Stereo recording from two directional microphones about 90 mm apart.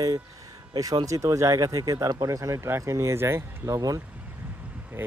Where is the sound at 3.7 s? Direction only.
40° right (ahead or behind).